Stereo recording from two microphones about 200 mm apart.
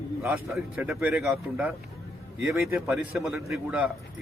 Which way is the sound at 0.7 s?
10° right (ahead or behind).